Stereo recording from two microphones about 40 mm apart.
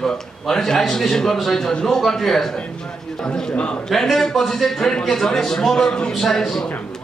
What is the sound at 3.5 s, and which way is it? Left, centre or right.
Speech, left.